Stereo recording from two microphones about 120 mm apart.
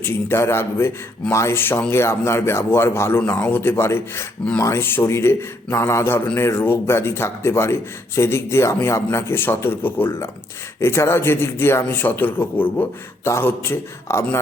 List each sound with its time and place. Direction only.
0.0 s speech: 20° left (ahead or behind)